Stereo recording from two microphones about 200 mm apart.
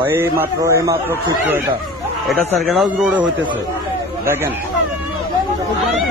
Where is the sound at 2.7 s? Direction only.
Centre (ahead or behind).